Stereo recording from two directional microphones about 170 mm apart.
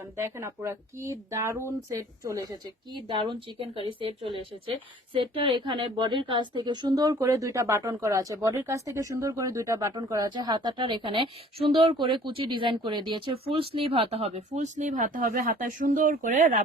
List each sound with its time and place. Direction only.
0.2 s speech: 15° right (ahead or behind); by 16.6 s 50° right (ahead or behind)